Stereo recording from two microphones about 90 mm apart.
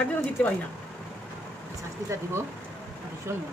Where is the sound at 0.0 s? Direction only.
15° left (ahead or behind).